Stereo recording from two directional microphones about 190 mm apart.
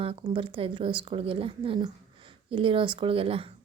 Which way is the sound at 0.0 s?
30° right (ahead or behind).